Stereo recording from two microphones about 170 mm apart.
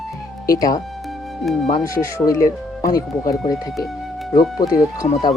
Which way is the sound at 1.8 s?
20° left (ahead or behind).